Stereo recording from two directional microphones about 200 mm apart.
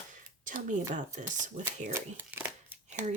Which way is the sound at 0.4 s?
40° right (ahead or behind).